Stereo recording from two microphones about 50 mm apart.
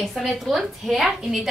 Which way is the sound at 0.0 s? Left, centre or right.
Centre.